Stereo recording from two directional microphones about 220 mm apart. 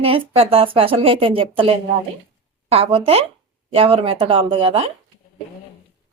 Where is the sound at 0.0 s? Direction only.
25° right (ahead or behind).